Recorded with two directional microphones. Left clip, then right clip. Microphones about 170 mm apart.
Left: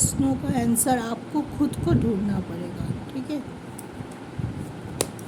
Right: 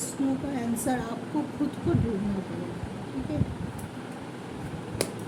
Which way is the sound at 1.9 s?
75° left (ahead or behind).